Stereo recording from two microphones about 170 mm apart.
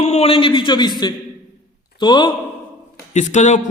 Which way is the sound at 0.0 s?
40° left (ahead or behind).